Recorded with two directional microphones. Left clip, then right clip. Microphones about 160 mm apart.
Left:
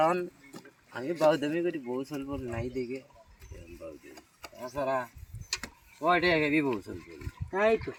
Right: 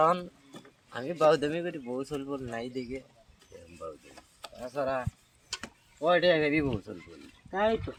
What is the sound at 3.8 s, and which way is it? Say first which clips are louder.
Speech: right 3 dB; 20° right (ahead or behind).